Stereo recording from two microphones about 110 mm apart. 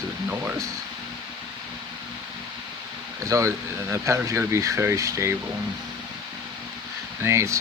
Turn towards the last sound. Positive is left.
turn(degrees=-25)  # may be behind; listen again after turning